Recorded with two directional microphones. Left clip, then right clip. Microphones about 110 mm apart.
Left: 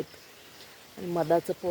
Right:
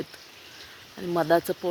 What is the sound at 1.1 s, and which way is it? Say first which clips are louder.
Speech: right 3 dB; 35° right (ahead or behind).